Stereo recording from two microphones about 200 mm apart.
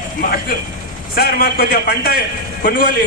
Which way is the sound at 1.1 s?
50° left (ahead or behind).